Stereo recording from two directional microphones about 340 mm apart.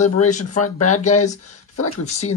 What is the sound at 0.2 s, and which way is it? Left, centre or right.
Speech, left.